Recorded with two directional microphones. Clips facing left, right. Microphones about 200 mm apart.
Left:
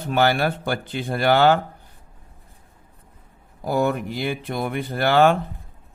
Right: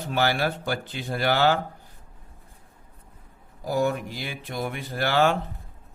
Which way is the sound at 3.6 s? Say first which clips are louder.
Left 3 dB; 60° left (ahead or behind).